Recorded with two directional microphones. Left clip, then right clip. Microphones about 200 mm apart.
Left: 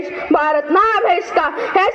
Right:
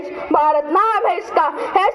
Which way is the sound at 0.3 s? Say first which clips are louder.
Even; 65° right (ahead or behind).